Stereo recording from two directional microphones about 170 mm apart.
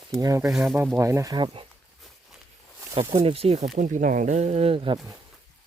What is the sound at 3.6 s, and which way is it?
Speech, 50° right (ahead or behind).